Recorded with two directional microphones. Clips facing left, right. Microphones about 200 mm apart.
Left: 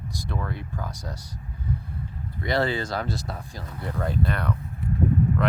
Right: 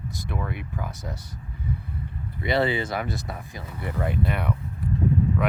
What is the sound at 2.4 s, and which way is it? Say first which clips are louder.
Speech: right 1 dB; 20° right (ahead or behind).